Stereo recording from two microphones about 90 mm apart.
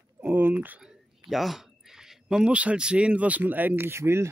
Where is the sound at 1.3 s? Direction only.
Centre (ahead or behind).